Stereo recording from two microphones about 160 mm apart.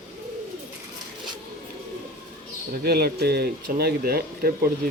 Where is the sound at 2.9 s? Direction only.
75° right (ahead or behind).